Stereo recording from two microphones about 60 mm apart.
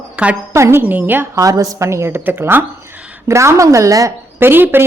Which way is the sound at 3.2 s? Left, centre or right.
Right.